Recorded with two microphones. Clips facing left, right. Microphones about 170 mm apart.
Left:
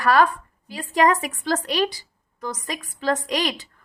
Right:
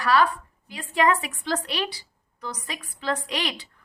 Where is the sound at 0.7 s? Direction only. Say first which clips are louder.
Left 3 dB; 40° left (ahead or behind).